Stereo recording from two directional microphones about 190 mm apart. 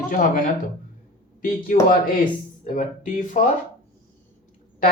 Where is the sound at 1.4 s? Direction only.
45° left (ahead or behind).